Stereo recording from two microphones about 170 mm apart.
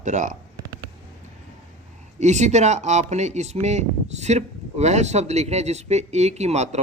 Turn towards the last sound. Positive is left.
turn(degrees=-40)  # may be behind; listen again after turning